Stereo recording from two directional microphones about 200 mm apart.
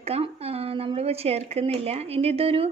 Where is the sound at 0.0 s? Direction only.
30° right (ahead or behind).